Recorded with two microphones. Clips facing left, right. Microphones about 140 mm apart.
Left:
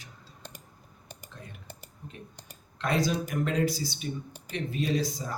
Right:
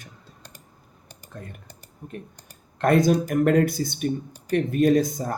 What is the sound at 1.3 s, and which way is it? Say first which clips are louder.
Speech: right 8 dB; 50° right (ahead or behind).